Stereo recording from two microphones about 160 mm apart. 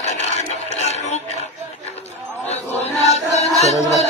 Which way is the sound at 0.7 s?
45° left (ahead or behind).